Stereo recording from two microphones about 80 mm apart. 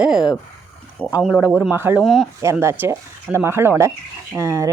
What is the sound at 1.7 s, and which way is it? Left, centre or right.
Speech, right.